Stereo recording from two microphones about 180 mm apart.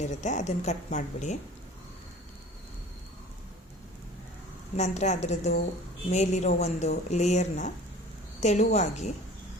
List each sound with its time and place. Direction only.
0.0 s speech: 40° left (ahead or behind)
4.8 s speech: 40° left (ahead or behind)